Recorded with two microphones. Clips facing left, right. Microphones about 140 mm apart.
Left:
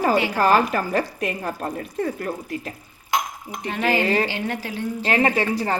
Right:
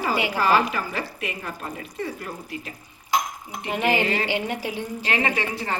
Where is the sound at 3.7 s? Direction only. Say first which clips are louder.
Left 2 dB; 20° right (ahead or behind).